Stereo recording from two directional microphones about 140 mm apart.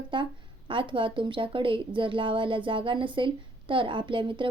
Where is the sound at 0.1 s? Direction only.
35° right (ahead or behind).